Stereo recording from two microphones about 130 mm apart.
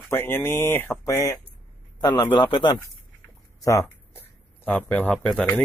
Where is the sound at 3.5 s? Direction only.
25° left (ahead or behind).